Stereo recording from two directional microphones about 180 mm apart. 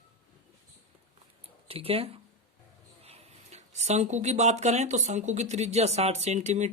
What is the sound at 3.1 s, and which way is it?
Speech, 40° right (ahead or behind).